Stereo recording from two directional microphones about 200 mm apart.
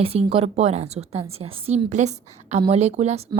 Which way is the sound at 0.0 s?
30° right (ahead or behind).